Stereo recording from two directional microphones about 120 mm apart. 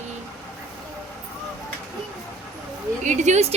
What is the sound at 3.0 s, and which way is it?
Speech, 85° right.